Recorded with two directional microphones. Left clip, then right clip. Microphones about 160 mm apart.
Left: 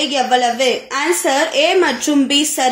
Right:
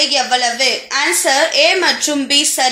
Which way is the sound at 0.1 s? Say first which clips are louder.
Even; 55° left (ahead or behind).